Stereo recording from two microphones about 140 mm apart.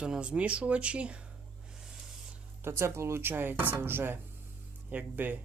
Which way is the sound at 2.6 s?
20° right (ahead or behind).